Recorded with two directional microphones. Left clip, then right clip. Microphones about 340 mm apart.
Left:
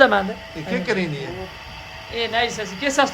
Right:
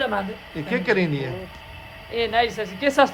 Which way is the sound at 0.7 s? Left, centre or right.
Right.